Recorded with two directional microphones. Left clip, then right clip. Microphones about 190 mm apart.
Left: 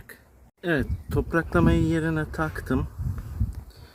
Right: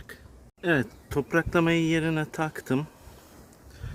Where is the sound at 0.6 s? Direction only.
5° left (ahead or behind).